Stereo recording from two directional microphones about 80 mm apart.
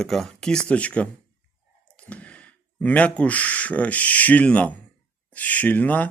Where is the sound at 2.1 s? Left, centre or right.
Centre.